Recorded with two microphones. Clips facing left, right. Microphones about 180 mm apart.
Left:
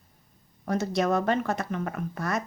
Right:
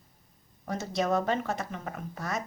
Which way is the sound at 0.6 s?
65° left (ahead or behind).